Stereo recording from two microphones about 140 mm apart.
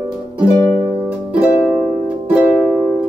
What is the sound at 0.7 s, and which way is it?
Music, 30° right (ahead or behind).